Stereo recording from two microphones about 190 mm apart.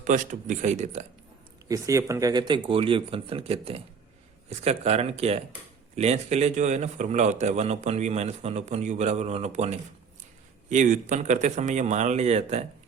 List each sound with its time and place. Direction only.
0.0 s a man's voice: 45° right (ahead or behind)
1.6 s a man's voice: 15° right (ahead or behind); by 12.6 s 35° right (ahead or behind)